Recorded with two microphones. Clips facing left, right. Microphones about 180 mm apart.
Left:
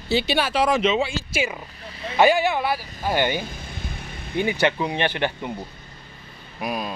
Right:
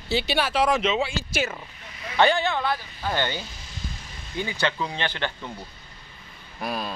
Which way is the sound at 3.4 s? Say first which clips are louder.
Left 5 dB; 55° left (ahead or behind).